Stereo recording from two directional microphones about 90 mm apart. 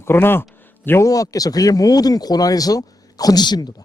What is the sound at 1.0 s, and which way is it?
A man's voice, 40° left (ahead or behind).